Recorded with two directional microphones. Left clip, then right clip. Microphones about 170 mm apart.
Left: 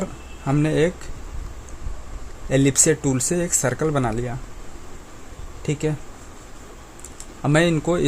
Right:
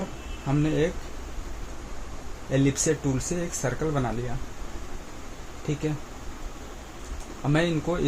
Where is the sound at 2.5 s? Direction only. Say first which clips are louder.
Left 6 dB; 75° left (ahead or behind).